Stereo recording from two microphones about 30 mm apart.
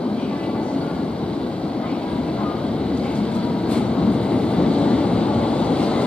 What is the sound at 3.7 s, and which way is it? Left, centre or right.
Vehicle, left.